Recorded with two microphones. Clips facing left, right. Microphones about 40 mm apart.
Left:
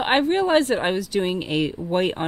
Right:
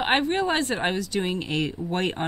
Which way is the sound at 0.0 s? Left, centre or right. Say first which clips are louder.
Left 3 dB; centre.